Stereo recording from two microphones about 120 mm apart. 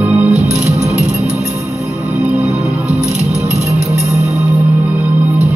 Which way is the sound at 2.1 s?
5° right (ahead or behind).